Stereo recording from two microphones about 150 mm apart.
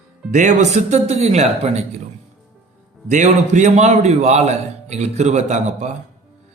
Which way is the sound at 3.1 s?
50° right (ahead or behind).